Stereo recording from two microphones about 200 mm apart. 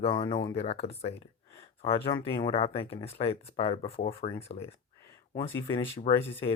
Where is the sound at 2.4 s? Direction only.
30° left (ahead or behind).